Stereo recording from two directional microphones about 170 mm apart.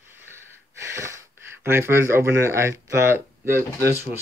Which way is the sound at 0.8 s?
15° right (ahead or behind).